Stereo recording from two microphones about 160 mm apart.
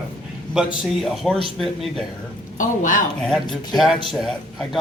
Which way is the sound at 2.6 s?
55° left (ahead or behind).